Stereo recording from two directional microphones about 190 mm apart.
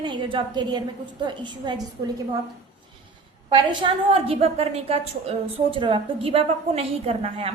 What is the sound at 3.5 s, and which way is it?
A woman's voice, 25° right (ahead or behind).